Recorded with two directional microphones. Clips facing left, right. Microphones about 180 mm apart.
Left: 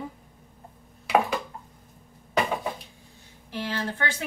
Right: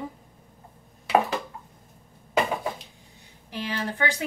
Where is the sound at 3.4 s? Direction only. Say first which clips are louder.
Even; 15° right (ahead or behind).